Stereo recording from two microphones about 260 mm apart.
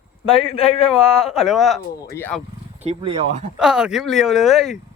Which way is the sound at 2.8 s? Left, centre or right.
Right.